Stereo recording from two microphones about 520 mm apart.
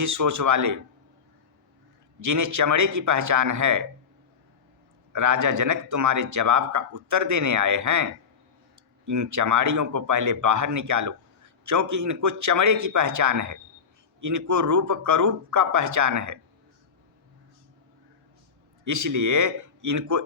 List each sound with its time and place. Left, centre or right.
0.0 s a man's voice: right
2.2 s a man's voice: right
5.1 s a man's voice: right
18.9 s a man's voice: right